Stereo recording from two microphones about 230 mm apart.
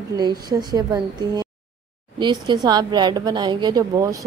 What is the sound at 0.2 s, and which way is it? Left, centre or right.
A woman's voice, centre.